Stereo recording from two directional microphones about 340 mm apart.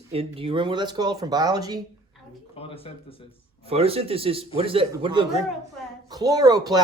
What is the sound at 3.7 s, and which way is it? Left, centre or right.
Speech, centre.